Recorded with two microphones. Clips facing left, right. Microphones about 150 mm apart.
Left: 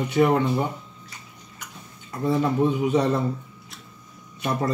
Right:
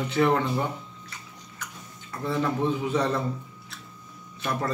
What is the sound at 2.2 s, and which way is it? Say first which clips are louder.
Speech: left 4 dB; 20° left (ahead or behind).